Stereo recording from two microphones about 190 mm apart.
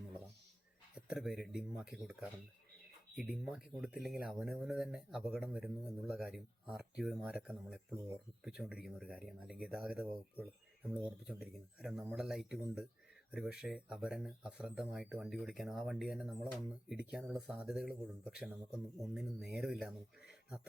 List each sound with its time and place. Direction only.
0.9 s speech: 5° right (ahead or behind)
3.2 s speech: 5° right (ahead or behind)